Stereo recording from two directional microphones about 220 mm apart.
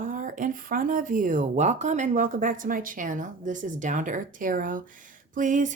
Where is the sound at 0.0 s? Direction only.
35° right (ahead or behind).